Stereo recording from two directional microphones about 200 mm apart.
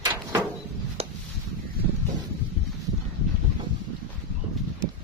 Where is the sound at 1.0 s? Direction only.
30° right (ahead or behind).